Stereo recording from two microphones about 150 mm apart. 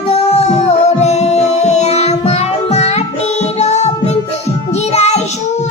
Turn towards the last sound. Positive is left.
turn(degrees=45)  # may be behind; listen again after turning